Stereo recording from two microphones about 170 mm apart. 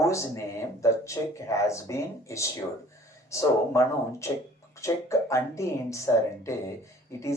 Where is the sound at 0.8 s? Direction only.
15° left (ahead or behind).